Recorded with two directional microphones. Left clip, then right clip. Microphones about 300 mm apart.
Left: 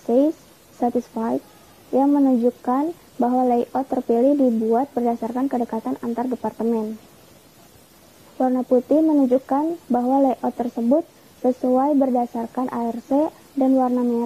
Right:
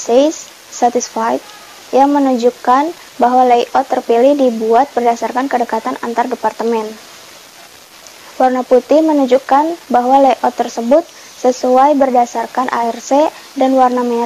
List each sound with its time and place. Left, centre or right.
0.0 s speech: right
0.7 s speech: centre
8.4 s speech: centre
8.8 s speech: right
9.3 s speech: centre